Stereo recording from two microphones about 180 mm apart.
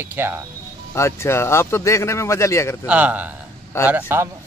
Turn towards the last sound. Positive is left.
turn(degrees=-10)  # may be behind; listen again after turning